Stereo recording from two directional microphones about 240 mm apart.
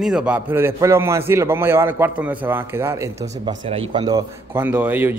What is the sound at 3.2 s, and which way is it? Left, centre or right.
A man's voice, right.